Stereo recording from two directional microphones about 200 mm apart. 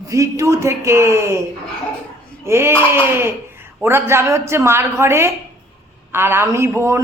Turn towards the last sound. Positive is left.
turn(degrees=-15)  # may be behind; listen again after turning